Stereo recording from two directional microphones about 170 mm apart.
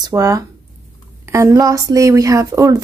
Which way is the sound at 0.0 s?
20° right (ahead or behind).